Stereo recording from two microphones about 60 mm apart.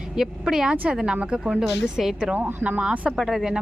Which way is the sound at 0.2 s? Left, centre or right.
Centre.